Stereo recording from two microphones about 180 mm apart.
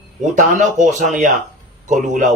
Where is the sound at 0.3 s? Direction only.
45° right (ahead or behind).